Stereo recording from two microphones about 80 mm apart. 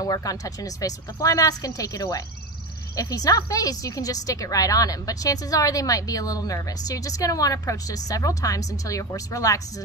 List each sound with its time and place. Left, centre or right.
0.0 s a woman's voice: left